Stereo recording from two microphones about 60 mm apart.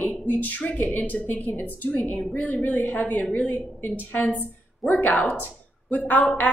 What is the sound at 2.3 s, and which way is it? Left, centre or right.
A woman's voice, left.